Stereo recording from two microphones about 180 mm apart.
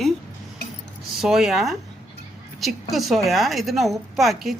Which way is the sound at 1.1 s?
Centre (ahead or behind).